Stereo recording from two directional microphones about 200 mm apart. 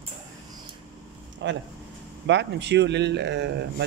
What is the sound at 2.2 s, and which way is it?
Speech, 60° right (ahead or behind).